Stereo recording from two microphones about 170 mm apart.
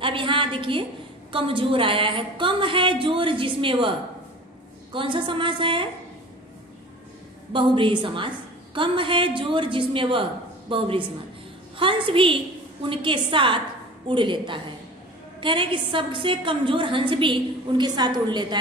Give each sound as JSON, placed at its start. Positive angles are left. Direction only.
{"t": 0.0, "sound": "a woman's voice", "side_deg": -30}
{"t": 4.9, "sound": "a woman's voice", "side_deg": -30}
{"t": 7.5, "sound": "a woman's voice", "side_deg": -30}